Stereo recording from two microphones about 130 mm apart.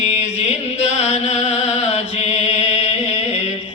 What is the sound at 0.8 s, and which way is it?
Chant, 55° left (ahead or behind).